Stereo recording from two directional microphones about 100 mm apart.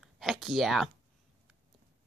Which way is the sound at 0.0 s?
Centre (ahead or behind).